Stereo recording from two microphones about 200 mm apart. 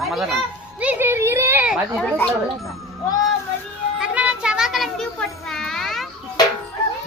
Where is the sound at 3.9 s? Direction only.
5° right (ahead or behind).